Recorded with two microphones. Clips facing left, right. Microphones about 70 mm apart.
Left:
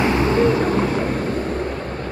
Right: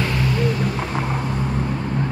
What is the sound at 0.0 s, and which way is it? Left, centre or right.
Vehicle, left.